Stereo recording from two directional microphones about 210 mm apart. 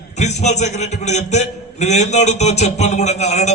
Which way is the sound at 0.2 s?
35° left (ahead or behind).